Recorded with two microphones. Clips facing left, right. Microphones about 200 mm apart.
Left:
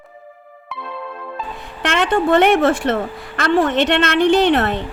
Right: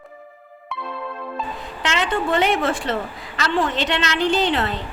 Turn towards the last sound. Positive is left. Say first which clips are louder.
# left 6 dB
turn(degrees=60)  # may be behind; listen again after turning